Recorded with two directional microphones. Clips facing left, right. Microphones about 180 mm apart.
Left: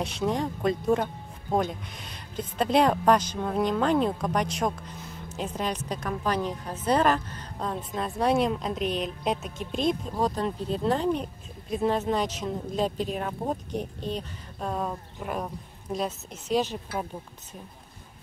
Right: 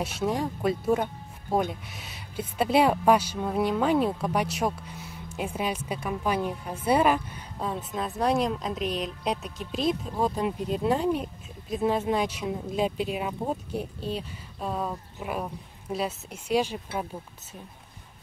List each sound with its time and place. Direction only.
0.0 s speech: 5° right (ahead or behind)